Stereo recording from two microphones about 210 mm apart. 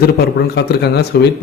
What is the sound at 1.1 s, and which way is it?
Speech, 50° left (ahead or behind).